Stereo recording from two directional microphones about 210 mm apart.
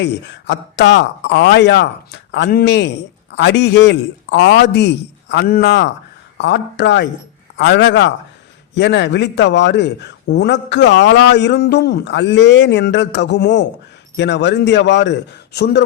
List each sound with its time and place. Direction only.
0.0 s a man's voice: 55° left (ahead or behind)